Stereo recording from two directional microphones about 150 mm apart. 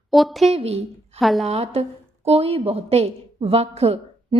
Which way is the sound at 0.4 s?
45° right (ahead or behind).